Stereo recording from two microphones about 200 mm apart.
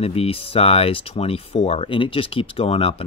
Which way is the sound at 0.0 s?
30° left (ahead or behind).